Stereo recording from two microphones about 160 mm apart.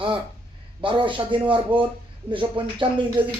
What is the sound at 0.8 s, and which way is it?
Speech, 30° right (ahead or behind).